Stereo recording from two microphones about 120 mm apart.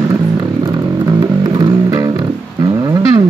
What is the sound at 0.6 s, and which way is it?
Music, 30° right (ahead or behind).